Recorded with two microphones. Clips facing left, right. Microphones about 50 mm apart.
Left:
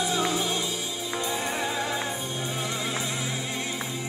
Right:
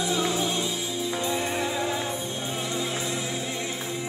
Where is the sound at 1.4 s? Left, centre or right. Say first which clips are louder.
Right 1 dB; left.